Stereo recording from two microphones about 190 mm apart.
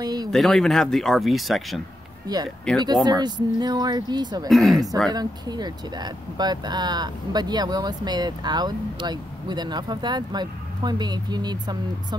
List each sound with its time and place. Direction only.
0.0 s speech: 20° right (ahead or behind)
0.3 s speech: centre (ahead or behind)
2.2 s speech: 20° right (ahead or behind)
4.5 s speech: centre (ahead or behind)
5.1 s speech: 20° right (ahead or behind)